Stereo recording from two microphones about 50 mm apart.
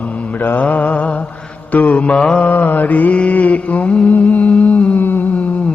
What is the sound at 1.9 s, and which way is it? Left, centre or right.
Mantra, left.